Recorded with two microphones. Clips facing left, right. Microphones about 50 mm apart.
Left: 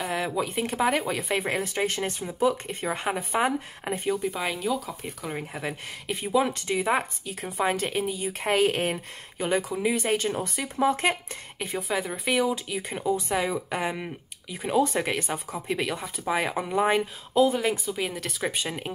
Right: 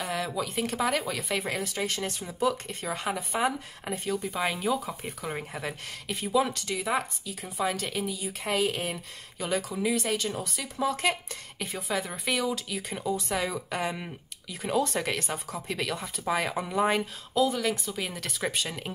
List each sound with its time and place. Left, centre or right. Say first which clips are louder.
0.1 s speech: left 3 dB; left
4.4 s speech: even; centre
5.7 s speech: left 3 dB; centre
17.8 s speech: left 4 dB; centre
18.5 s speech: left 2 dB; centre